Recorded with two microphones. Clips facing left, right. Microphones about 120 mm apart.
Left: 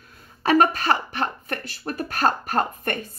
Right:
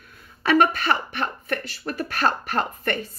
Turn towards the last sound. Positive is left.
turn(degrees=45)  # may be behind; listen again after turning